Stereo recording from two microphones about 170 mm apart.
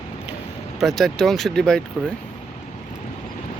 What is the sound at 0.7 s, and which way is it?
Speech, centre (ahead or behind).